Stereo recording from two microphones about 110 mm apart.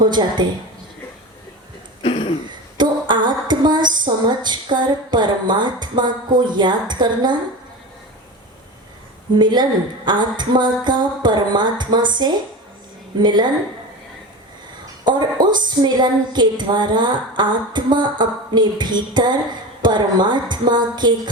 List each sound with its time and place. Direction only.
0.0 s a woman's voice: 40° right (ahead or behind)
2.0 s throat clearing: 55° left (ahead or behind)
2.7 s speech: 45° right (ahead or behind)
9.3 s a woman's voice: 45° right (ahead or behind)
15.0 s a woman's voice: 45° right (ahead or behind)